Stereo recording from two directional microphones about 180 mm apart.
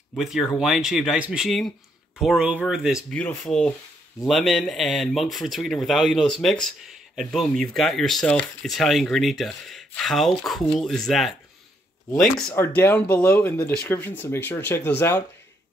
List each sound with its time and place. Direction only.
0.1 s speech: centre (ahead or behind)
12.5 s speech: 10° left (ahead or behind)